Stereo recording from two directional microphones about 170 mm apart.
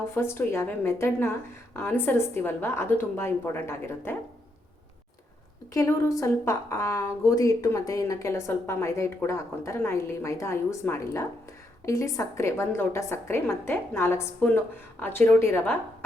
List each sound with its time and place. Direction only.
0.1 s a woman's voice: 15° left (ahead or behind)
5.7 s a woman's voice: 20° left (ahead or behind)